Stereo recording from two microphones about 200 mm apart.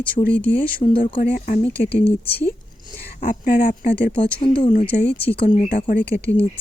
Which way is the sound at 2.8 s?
45° left (ahead or behind).